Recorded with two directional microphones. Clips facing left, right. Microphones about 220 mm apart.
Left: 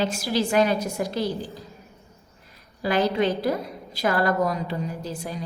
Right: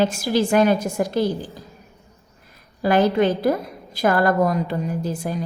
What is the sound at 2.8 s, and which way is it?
A woman's voice, 50° right (ahead or behind).